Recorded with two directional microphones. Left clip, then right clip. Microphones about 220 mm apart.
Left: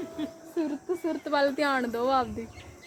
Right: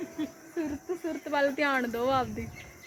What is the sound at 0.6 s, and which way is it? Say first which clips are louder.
A woman's voice: left 3 dB; 15° left (ahead or behind).